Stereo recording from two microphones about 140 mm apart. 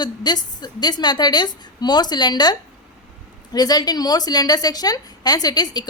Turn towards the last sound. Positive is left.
turn(degrees=30)  # may be behind; listen again after turning